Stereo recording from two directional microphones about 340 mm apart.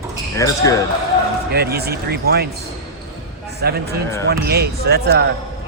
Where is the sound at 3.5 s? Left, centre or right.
Right.